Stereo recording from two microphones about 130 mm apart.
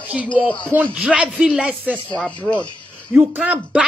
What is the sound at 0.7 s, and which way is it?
Speech, 15° right (ahead or behind).